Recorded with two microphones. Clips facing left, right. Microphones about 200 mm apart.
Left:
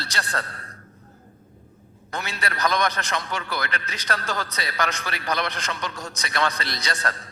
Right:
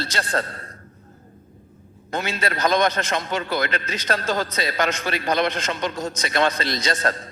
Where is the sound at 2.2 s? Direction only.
25° right (ahead or behind).